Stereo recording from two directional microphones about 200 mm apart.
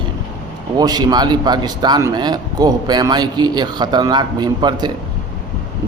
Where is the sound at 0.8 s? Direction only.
20° right (ahead or behind).